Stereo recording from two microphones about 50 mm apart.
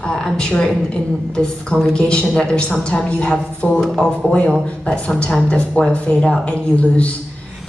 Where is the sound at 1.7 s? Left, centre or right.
Centre.